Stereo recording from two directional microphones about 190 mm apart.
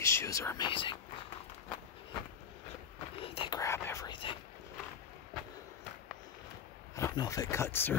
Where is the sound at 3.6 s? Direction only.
15° left (ahead or behind).